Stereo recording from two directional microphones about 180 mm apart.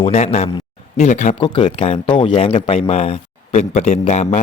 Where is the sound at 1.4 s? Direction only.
30° left (ahead or behind).